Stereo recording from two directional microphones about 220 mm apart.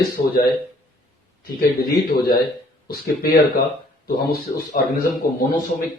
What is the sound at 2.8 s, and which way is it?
A man's voice, 45° left (ahead or behind).